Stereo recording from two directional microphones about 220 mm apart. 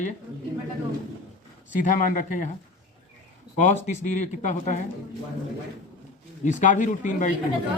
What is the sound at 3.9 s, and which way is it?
Speech, 35° left (ahead or behind).